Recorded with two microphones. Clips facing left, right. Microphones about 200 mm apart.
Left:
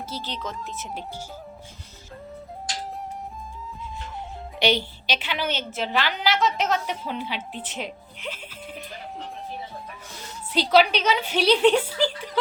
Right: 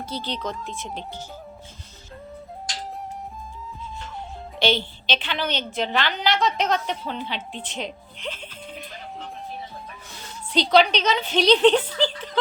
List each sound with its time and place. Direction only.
0.0 s speech: 5° left (ahead or behind)
4.6 s a woman's voice: 10° left (ahead or behind)
10.5 s a woman's voice: 5° left (ahead or behind)